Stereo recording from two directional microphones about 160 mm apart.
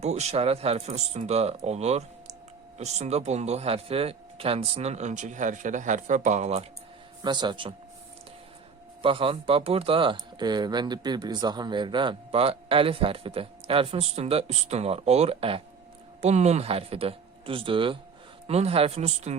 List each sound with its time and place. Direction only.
0.0 s speech: 45° right (ahead or behind)
7.2 s a man's voice: 25° right (ahead or behind)
9.0 s speech: 35° right (ahead or behind)